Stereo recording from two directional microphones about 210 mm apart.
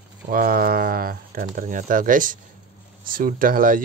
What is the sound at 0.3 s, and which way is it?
Speech, 45° right (ahead or behind).